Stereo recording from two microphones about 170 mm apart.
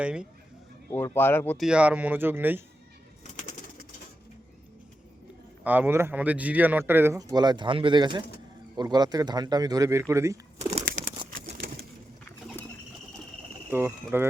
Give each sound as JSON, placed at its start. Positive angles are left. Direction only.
{"t": 0.0, "sound": "speech", "side_deg": -5}
{"t": 0.9, "sound": "speech", "side_deg": 15}
{"t": 1.5, "sound": "a man's voice", "side_deg": -5}
{"t": 5.6, "sound": "a man's voice", "side_deg": -10}
{"t": 11.5, "sound": "pigeon", "side_deg": -65}
{"t": 13.7, "sound": "speech", "side_deg": -15}